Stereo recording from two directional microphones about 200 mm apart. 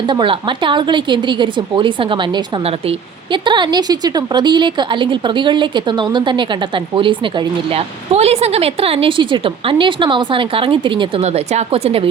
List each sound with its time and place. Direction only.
0.1 s a woman's voice: 25° right (ahead or behind)